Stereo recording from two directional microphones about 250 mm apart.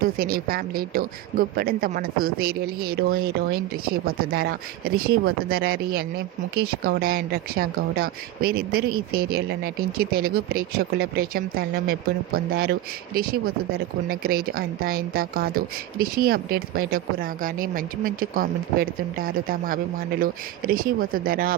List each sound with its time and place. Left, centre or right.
0.0 s a woman's voice: right